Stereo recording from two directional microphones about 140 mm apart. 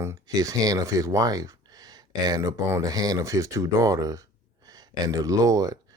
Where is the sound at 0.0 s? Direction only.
20° right (ahead or behind).